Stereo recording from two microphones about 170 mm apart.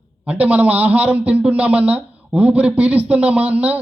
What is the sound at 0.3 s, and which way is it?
A man's voice, 10° right (ahead or behind).